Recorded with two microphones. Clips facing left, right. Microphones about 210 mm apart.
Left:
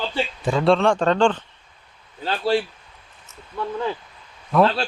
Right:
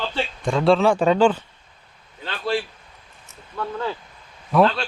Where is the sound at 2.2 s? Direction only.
35° left (ahead or behind).